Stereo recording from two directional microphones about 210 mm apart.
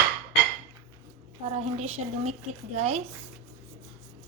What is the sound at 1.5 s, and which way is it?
Speech, 30° right (ahead or behind).